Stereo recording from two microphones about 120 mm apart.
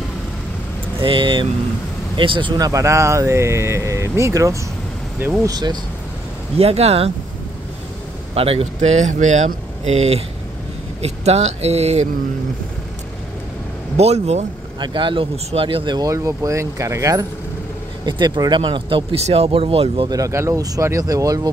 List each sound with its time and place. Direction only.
0.9 s speech: 45° right (ahead or behind)
6.6 s speech: 60° right (ahead or behind)
8.4 s speech: 55° right (ahead or behind)
13.9 s speech: 65° right (ahead or behind)
14.8 s speech: 45° right (ahead or behind)
16.1 s speech: 25° right (ahead or behind)
18.0 s speech: 40° right (ahead or behind)
20.1 s speech: 25° right (ahead or behind)